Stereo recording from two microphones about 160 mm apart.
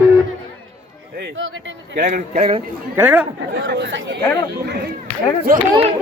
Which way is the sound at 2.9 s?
10° right (ahead or behind).